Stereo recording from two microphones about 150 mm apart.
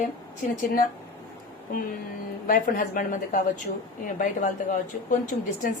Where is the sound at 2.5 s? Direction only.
65° left (ahead or behind).